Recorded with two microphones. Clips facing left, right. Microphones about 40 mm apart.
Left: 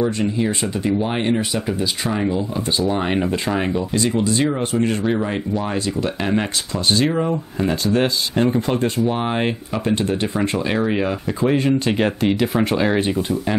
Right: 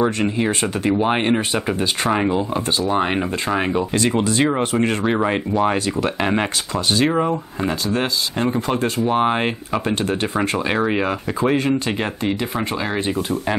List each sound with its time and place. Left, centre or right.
0.0 s speech: right
2.9 s speech: centre
3.9 s speech: right
4.4 s speech: right
7.9 s speech: centre
9.0 s speech: centre
11.9 s speech: centre